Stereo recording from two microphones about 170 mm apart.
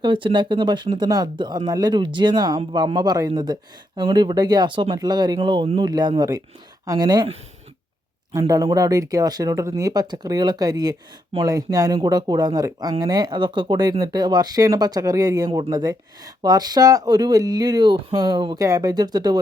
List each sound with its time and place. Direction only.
0.0 s speech: 30° right (ahead or behind)
8.3 s speech: 20° right (ahead or behind)